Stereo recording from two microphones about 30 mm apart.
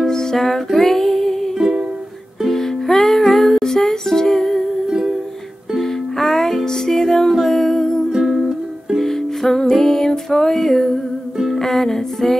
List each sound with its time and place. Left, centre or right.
0.0 s music: centre
2.5 s music: centre
3.6 s music: centre
5.8 s music: centre